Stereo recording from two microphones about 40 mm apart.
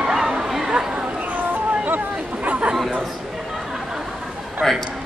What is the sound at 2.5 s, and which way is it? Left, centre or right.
Chatter, right.